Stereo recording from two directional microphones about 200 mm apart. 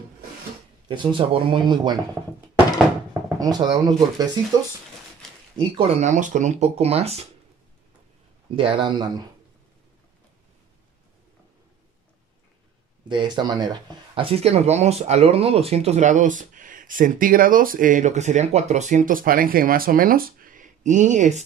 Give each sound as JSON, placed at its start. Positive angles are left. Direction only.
{"t": 0.8, "sound": "speech", "side_deg": -25}
{"t": 3.3, "sound": "speech", "side_deg": -20}
{"t": 5.6, "sound": "speech", "side_deg": -30}
{"t": 8.5, "sound": "speech", "side_deg": -25}
{"t": 13.1, "sound": "speech", "side_deg": -20}